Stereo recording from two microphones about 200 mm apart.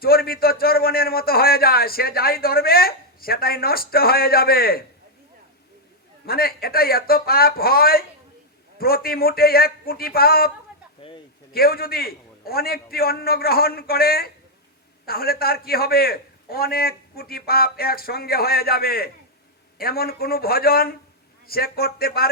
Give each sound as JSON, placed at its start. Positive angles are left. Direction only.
{"t": 0.0, "sound": "a man's voice", "side_deg": 50}
{"t": 6.2, "sound": "a man's voice", "side_deg": 50}
{"t": 11.5, "sound": "a man's voice", "side_deg": 50}